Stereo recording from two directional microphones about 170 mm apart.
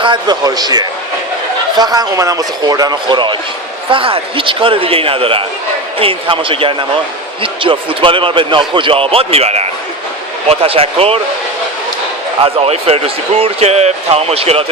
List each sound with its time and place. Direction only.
0.0 s speech: 25° right (ahead or behind)
12.4 s speech: 35° right (ahead or behind)